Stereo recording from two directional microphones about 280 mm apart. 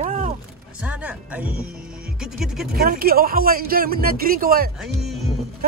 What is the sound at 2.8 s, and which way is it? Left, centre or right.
Speech, right.